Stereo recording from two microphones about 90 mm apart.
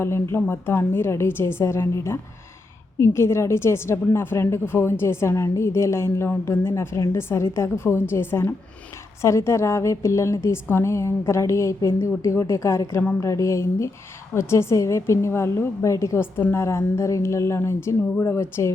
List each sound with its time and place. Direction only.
0.0 s a woman's voice: 30° left (ahead or behind)